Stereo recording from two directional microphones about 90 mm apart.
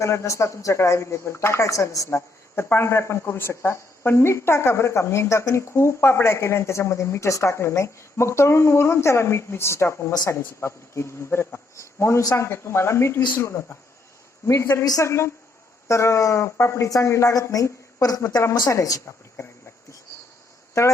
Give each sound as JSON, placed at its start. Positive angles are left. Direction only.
{"t": 0.0, "sound": "speech", "side_deg": 30}